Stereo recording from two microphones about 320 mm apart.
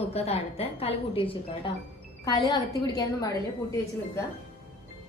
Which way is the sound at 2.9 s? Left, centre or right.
Centre.